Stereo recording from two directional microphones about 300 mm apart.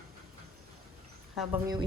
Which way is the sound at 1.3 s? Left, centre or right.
Centre.